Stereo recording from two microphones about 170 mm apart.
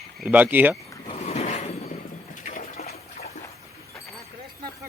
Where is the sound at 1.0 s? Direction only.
40° left (ahead or behind).